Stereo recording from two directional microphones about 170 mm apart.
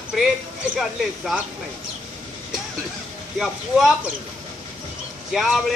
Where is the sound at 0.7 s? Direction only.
Centre (ahead or behind).